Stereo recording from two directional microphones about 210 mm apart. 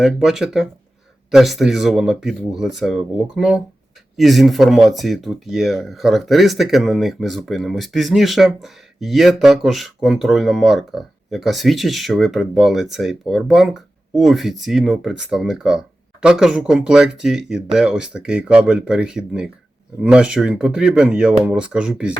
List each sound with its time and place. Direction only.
0.0 s speech: centre (ahead or behind)